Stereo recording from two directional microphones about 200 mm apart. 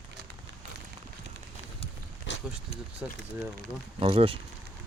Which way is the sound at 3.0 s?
10° right (ahead or behind).